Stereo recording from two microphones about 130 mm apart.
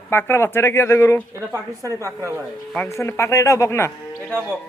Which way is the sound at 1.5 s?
25° right (ahead or behind).